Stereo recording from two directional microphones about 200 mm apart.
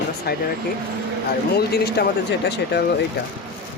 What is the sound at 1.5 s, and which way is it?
Speech, 55° left (ahead or behind).